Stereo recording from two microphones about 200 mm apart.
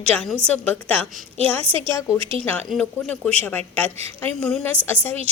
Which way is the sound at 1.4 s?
5° left (ahead or behind).